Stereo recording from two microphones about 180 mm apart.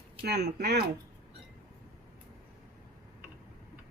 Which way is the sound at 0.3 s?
65° right (ahead or behind).